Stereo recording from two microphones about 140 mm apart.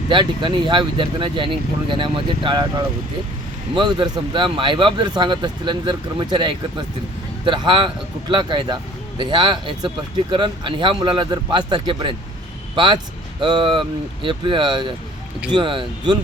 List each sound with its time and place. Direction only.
0.1 s speech: 35° right (ahead or behind)